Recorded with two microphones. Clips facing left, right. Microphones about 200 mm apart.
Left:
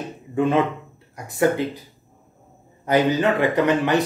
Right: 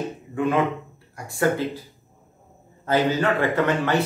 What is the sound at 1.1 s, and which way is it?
Speech, 20° left (ahead or behind).